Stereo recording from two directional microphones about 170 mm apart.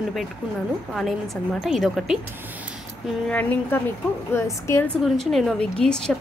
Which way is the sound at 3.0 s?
10° left (ahead or behind).